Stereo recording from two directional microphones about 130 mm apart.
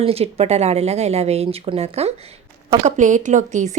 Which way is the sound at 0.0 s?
50° right (ahead or behind).